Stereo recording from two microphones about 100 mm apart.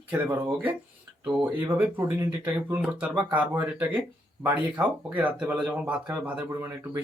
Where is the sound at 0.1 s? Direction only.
20° right (ahead or behind).